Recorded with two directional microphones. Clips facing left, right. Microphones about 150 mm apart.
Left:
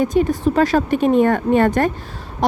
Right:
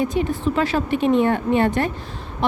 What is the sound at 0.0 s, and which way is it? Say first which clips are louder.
A woman's voice: left 5 dB; 45° left (ahead or behind).